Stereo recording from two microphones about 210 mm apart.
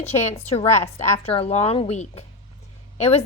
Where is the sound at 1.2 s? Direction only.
30° left (ahead or behind).